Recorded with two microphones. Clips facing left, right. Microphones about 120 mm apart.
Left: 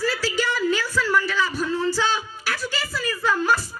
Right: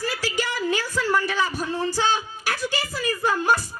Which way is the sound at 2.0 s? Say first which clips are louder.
Right 1 dB; 50° right (ahead or behind).